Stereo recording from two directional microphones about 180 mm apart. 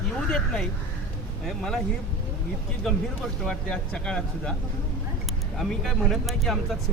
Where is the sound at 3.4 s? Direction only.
5° left (ahead or behind).